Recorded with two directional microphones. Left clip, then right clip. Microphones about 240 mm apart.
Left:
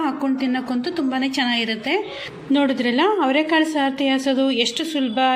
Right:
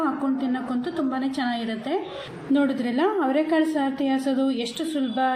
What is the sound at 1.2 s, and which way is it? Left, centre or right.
Speech, left.